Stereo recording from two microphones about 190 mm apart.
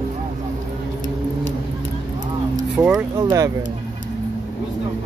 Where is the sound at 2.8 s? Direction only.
5° right (ahead or behind).